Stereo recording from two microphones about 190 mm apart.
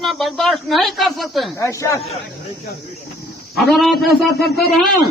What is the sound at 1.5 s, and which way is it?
Speech, 15° left (ahead or behind).